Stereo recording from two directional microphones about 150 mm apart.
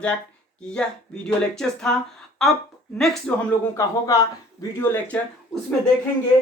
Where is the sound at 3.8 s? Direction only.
25° left (ahead or behind).